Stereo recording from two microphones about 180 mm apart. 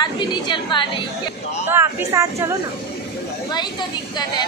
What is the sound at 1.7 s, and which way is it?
Speech, 15° right (ahead or behind).